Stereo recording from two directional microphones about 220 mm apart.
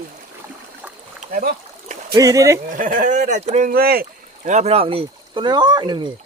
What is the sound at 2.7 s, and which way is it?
Speech, 35° right (ahead or behind).